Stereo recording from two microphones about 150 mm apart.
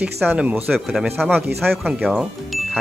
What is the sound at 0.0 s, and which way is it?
Speech, 5° right (ahead or behind).